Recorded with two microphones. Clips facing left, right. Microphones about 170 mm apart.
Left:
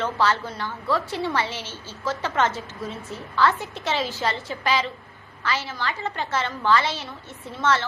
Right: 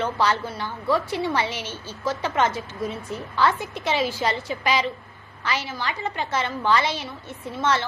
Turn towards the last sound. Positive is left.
turn(degrees=-15)  # may be behind; listen again after turning